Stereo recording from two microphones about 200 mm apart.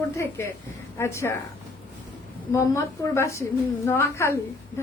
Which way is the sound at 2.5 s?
15° left (ahead or behind).